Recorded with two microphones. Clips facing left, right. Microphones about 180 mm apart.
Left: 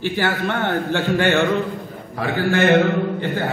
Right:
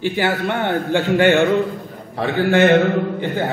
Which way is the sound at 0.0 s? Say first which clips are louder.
Right 2 dB; 15° right (ahead or behind).